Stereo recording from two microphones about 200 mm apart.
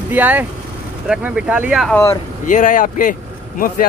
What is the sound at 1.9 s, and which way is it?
Speech, 15° left (ahead or behind).